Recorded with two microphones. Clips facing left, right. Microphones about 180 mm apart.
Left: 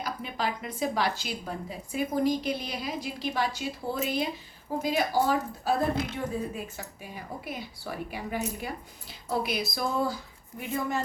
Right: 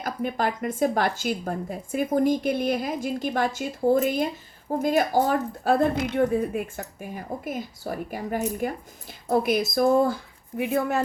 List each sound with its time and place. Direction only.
0.0 s a woman's voice: 50° right (ahead or behind)
10.6 s speech: 65° right (ahead or behind)